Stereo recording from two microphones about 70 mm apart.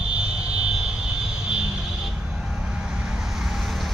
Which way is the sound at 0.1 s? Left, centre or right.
Centre.